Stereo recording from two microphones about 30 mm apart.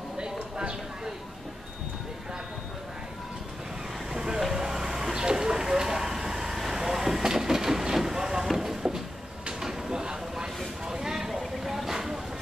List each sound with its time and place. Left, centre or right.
0.2 s clip-clop: right
4.1 s vehicle: right
6.6 s train: centre
8.5 s a sound: centre
10.9 s vehicle: centre